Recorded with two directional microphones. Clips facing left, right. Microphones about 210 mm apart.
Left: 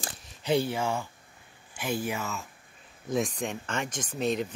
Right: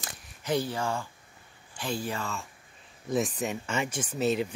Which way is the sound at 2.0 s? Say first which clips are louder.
Left 1 dB; 5° left (ahead or behind).